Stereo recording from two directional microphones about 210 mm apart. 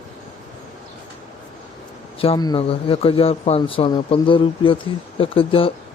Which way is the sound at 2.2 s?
20° left (ahead or behind).